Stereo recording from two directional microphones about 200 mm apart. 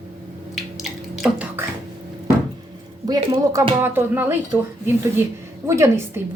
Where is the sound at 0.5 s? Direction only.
Centre (ahead or behind).